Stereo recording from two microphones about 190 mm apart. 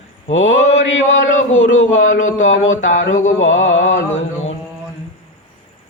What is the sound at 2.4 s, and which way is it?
Speech, 90° left.